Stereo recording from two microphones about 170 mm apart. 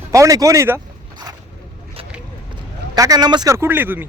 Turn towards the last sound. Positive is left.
turn(degrees=-10)  # may be behind; listen again after turning